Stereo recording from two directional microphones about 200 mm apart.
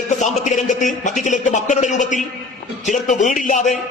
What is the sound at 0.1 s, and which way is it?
A man's voice, 35° left (ahead or behind).